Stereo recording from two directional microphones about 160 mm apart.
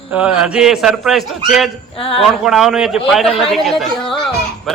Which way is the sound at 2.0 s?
35° left (ahead or behind).